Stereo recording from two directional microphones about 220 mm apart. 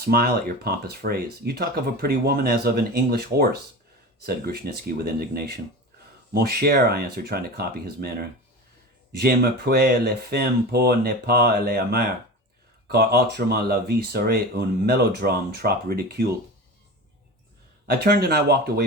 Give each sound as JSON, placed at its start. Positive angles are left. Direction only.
{"t": 0.0, "sound": "speech", "side_deg": -45}
{"t": 9.1, "sound": "speech", "side_deg": -45}
{"t": 17.8, "sound": "speech", "side_deg": -45}